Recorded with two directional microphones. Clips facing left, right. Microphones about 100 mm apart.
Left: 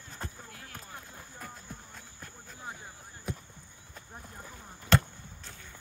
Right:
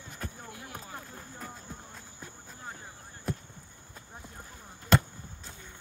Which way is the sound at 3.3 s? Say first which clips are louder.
Right 4 dB; centre (ahead or behind).